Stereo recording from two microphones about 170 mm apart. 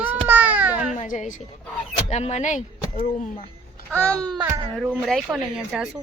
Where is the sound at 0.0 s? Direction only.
10° right (ahead or behind).